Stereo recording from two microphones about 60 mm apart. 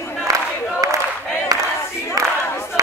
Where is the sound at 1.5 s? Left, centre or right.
Right.